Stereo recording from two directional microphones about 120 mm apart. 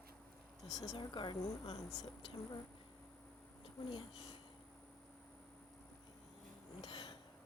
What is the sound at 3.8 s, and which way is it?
Speech, 40° left (ahead or behind).